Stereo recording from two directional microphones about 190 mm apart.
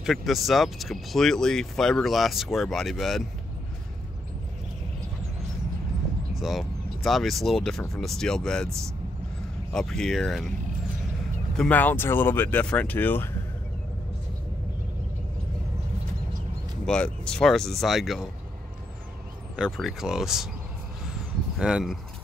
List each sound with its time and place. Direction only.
0.0 s speech: centre (ahead or behind)
6.4 s speech: centre (ahead or behind)
9.7 s speech: 5° left (ahead or behind)
11.5 s speech: 5° left (ahead or behind)
16.8 s speech: 5° left (ahead or behind)
19.5 s speech: centre (ahead or behind)
21.5 s speech: 5° right (ahead or behind)